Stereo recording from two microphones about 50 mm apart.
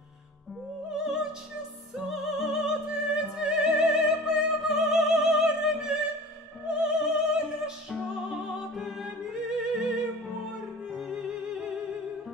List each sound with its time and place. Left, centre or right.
0.8 s music: centre
2.0 s opera: centre
2.9 s music: centre
6.6 s opera: centre
8.3 s music: centre